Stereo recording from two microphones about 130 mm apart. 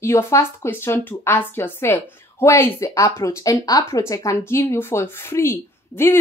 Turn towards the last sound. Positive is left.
turn(degrees=20)  # may be behind; listen again after turning